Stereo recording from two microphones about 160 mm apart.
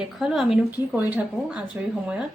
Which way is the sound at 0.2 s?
5° right (ahead or behind).